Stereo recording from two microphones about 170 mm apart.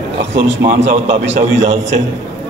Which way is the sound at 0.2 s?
90° right.